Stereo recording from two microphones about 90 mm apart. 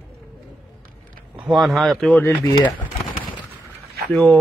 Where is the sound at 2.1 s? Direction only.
20° left (ahead or behind).